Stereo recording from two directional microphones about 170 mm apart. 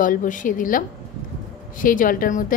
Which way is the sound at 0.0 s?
50° left (ahead or behind).